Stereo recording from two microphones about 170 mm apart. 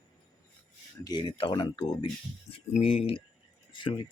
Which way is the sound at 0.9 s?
25° left (ahead or behind).